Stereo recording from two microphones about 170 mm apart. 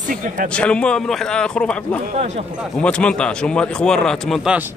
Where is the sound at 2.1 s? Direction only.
40° right (ahead or behind).